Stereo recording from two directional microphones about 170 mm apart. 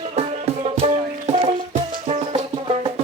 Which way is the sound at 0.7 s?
40° right (ahead or behind).